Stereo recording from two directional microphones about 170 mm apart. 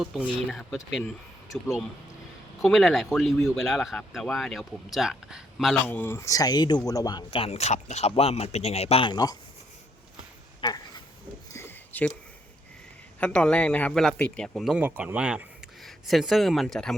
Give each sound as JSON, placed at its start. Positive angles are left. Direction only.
{"t": 0.2, "sound": "speech", "side_deg": 5}
{"t": 2.6, "sound": "speech", "side_deg": 0}
{"t": 5.9, "sound": "speech", "side_deg": 15}
{"t": 7.3, "sound": "speech", "side_deg": 35}
{"t": 10.6, "sound": "a sound", "side_deg": 25}
{"t": 11.5, "sound": "a sound", "side_deg": 15}
{"t": 13.1, "sound": "speech", "side_deg": 5}